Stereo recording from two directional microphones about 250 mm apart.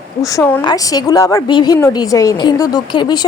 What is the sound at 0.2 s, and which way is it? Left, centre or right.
A woman's voice, centre.